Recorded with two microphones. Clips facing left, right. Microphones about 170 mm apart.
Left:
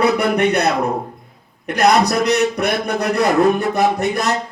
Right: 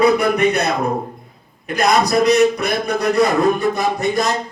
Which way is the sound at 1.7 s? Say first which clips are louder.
Left 2 dB; 70° left (ahead or behind).